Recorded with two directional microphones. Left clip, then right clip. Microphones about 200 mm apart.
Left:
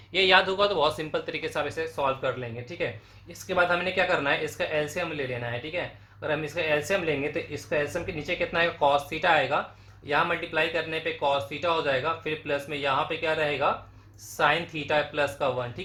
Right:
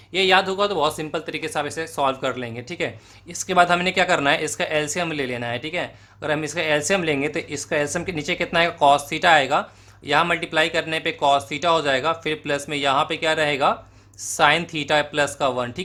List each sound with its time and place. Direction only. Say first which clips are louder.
0.1 s speech: right 3 dB; 25° right (ahead or behind); by 15.7 s 40° right (ahead or behind)